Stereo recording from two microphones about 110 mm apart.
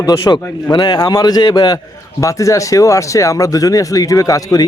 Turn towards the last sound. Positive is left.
turn(degrees=30)  # may be behind; listen again after turning